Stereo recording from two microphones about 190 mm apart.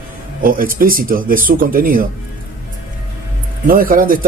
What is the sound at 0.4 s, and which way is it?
Speech, 50° right (ahead or behind).